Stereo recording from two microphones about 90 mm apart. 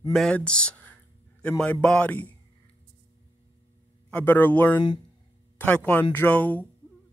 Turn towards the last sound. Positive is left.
turn(degrees=20)  # may be behind; listen again after turning